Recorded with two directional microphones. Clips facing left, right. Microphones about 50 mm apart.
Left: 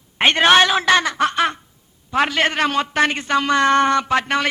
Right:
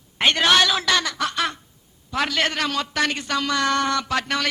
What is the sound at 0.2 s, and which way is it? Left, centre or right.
A woman's voice, left.